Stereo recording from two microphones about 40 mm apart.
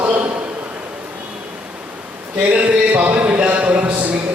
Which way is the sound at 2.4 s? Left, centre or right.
Right.